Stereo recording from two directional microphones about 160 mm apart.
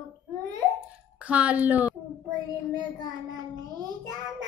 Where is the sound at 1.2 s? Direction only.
10° right (ahead or behind).